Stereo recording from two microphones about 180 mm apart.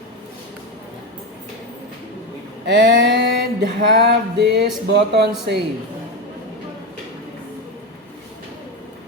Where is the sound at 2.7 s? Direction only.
65° right (ahead or behind).